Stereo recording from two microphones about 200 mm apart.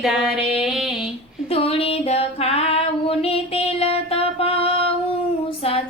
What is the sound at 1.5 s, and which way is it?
Female singing, 30° left (ahead or behind).